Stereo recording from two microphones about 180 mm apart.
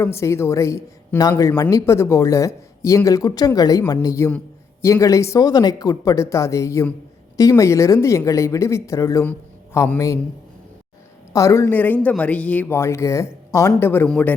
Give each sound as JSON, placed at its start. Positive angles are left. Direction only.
{"t": 0.0, "sound": "speech", "side_deg": 15}
{"t": 11.3, "sound": "speech", "side_deg": 15}